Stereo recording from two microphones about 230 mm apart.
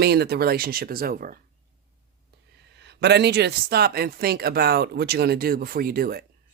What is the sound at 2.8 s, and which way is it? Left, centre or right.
Speech, right.